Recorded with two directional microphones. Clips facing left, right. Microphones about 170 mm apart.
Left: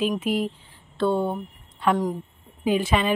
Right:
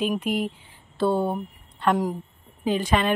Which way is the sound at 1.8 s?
10° left (ahead or behind).